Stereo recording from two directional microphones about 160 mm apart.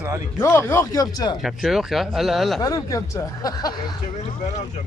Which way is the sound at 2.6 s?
20° left (ahead or behind).